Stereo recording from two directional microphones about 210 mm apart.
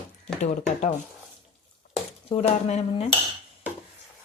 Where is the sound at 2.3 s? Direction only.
30° left (ahead or behind).